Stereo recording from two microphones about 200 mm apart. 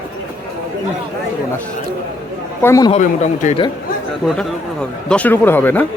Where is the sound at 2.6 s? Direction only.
15° left (ahead or behind).